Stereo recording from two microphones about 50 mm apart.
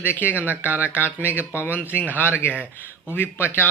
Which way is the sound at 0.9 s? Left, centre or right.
Left.